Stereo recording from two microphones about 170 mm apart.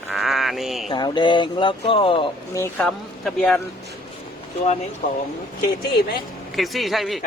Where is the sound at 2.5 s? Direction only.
15° left (ahead or behind).